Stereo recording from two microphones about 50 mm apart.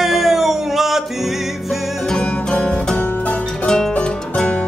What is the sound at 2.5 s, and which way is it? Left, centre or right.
Music, centre.